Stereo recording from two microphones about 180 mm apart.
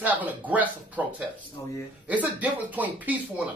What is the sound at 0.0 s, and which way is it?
Speech, 10° right (ahead or behind).